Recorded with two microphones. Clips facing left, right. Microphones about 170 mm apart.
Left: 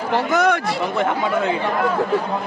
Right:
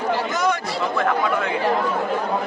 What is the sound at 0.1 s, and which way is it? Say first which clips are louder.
Chatter: left 6 dB; 60° left (ahead or behind).